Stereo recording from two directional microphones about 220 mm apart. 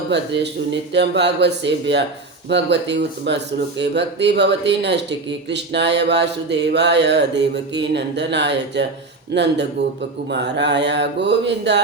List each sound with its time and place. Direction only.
0.1 s speech: 55° right (ahead or behind)